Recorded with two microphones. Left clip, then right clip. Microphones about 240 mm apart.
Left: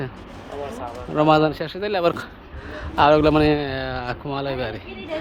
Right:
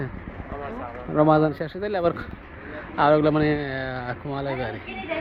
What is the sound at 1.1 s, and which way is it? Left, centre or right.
Speech, centre.